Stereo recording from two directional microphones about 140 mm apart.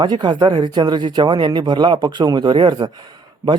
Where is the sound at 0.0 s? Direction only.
35° right (ahead or behind).